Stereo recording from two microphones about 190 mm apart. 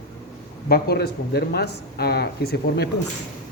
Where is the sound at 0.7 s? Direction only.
55° left (ahead or behind).